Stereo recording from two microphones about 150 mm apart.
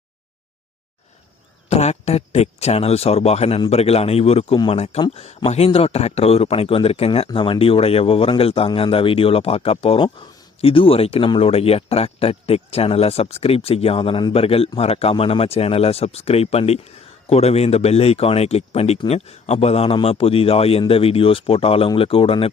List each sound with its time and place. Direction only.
1.7 s speech: 45° left (ahead or behind)